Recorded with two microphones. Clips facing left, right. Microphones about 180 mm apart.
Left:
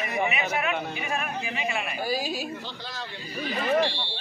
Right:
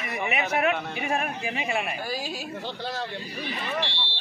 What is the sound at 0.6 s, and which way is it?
A man's voice, 50° right (ahead or behind).